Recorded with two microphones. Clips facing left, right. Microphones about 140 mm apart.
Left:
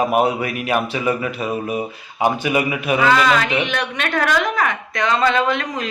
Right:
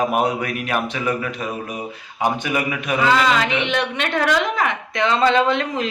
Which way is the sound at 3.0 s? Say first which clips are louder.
Left 1 dB; 25° right (ahead or behind).